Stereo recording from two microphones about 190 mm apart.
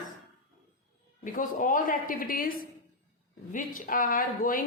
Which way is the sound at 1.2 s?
45° left (ahead or behind).